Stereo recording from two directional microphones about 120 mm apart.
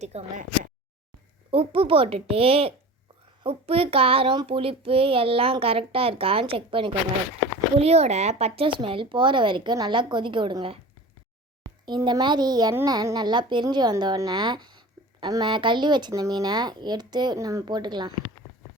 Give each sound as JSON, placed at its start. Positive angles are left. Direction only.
{"t": 0.0, "sound": "speech", "side_deg": -65}
{"t": 1.5, "sound": "speech", "side_deg": -50}
{"t": 7.8, "sound": "a woman's voice", "side_deg": -60}
{"t": 11.9, "sound": "a woman's voice", "side_deg": -35}